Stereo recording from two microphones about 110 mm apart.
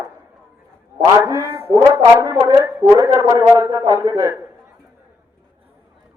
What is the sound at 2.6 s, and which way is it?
A woman's voice, 20° right (ahead or behind).